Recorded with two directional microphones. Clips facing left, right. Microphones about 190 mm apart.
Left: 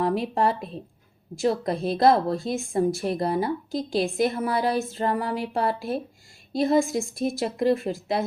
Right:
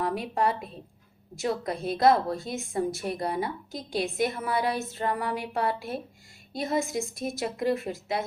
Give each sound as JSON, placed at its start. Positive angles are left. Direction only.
{"t": 0.0, "sound": "a woman's voice", "side_deg": 30}